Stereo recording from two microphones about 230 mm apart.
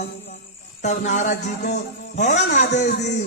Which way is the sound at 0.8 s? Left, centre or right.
Left.